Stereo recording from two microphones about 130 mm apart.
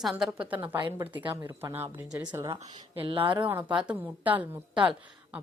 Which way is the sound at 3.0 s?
45° right (ahead or behind).